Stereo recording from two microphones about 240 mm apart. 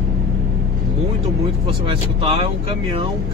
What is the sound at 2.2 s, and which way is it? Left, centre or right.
Speech, right.